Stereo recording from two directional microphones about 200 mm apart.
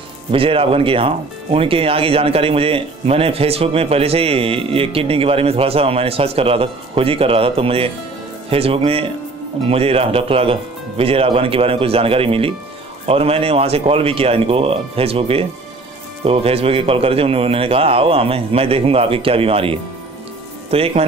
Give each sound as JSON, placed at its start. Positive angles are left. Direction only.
{"t": 0.3, "sound": "speech", "side_deg": -25}